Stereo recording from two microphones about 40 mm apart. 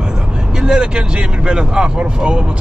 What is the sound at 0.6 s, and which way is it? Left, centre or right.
Speech, centre.